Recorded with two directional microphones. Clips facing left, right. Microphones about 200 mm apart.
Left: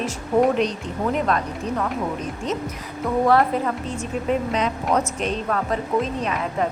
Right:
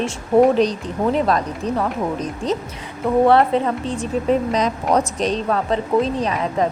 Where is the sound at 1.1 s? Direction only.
35° right (ahead or behind).